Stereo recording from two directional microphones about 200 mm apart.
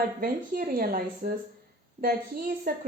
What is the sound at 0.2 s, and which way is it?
Speech, 45° right (ahead or behind).